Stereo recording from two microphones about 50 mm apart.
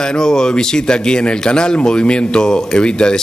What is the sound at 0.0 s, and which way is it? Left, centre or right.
Speech, centre.